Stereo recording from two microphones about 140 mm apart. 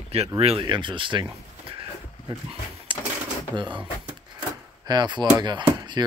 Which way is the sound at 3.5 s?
35° right (ahead or behind).